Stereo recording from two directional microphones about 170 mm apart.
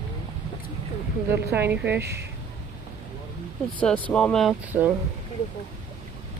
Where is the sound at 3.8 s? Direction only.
10° left (ahead or behind).